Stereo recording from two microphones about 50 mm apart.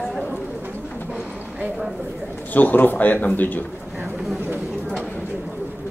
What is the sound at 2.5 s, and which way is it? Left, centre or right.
Speech, left.